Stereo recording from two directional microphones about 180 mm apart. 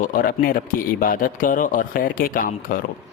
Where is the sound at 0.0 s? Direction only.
50° left (ahead or behind).